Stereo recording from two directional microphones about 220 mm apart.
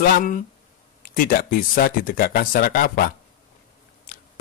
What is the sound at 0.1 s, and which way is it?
Speech, 40° left (ahead or behind).